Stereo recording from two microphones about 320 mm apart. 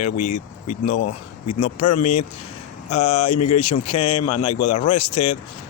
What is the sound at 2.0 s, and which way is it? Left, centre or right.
Speech, left.